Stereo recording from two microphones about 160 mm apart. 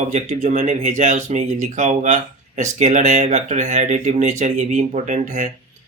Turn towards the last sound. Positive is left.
turn(degrees=-50)  # may be behind; listen again after turning